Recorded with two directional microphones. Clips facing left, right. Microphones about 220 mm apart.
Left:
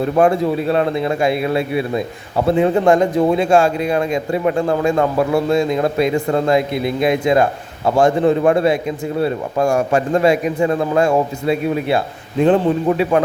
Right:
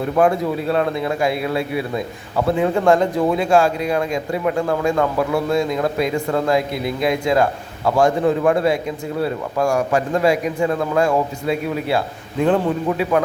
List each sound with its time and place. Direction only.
0.2 s speech: 25° left (ahead or behind)